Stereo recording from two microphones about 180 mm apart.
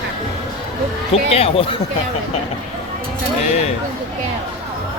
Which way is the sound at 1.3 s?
30° left (ahead or behind).